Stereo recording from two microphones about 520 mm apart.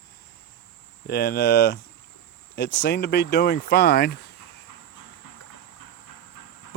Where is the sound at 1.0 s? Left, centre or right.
Centre.